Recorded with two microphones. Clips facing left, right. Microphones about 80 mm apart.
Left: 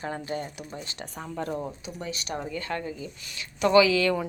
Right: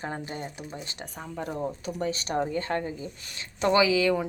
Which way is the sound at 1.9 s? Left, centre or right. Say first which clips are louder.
Right 5 dB; right.